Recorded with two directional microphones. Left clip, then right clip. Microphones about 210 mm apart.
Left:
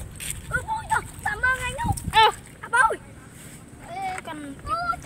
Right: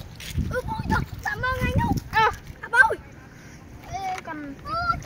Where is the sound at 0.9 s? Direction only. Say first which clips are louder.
Left 1 dB; 45° right (ahead or behind).